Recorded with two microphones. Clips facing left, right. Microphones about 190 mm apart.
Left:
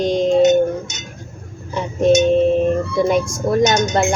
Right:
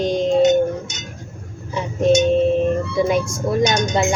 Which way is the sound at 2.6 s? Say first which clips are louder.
Left 2 dB; centre (ahead or behind).